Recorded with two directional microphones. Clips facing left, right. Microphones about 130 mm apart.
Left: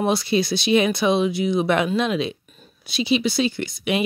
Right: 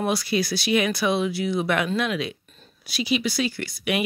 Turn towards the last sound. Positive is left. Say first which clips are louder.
# left 3 dB
turn(degrees=25)  # may be behind; listen again after turning